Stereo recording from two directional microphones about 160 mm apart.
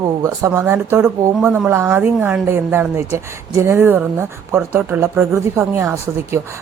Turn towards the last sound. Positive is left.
turn(degrees=-15)  # may be behind; listen again after turning